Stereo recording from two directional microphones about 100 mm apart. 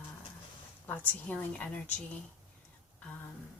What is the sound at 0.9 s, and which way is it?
A woman's voice, 15° left (ahead or behind).